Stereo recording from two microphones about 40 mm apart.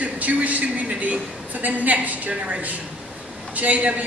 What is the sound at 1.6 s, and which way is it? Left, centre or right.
A man's voice, right.